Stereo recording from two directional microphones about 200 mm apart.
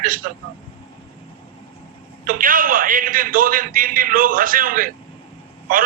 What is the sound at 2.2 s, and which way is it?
A man's voice, 45° right (ahead or behind).